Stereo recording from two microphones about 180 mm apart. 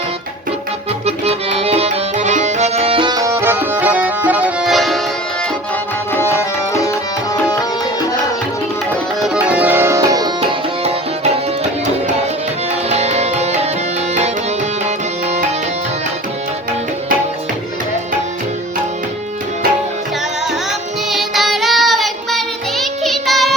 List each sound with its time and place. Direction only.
1.0 s music: 35° right (ahead or behind); by 5.0 s centre (ahead or behind)
6.1 s tabla: 15° left (ahead or behind)
9.2 s tabla: 5° right (ahead or behind)
12.9 s music: 35° right (ahead or behind)
14.8 s music: 35° right (ahead or behind)
21.1 s child singing: centre (ahead or behind)